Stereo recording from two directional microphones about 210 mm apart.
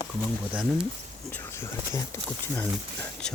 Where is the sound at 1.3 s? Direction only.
10° left (ahead or behind).